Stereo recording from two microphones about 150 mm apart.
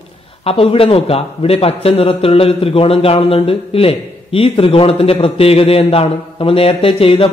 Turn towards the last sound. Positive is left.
turn(degrees=40)  # may be behind; listen again after turning